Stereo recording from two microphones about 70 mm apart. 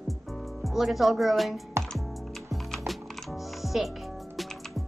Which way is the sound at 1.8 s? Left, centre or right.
Right.